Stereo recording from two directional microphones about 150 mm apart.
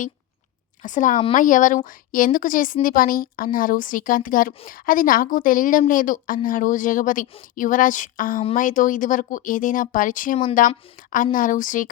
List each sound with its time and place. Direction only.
0.8 s a woman's voice: 60° left (ahead or behind)